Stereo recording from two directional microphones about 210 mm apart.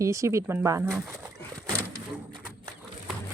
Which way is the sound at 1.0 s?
5° right (ahead or behind).